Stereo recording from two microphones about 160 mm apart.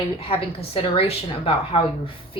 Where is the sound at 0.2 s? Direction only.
35° left (ahead or behind).